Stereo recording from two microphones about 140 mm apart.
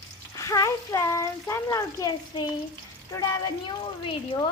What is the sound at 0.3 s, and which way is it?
Speech, 25° left (ahead or behind).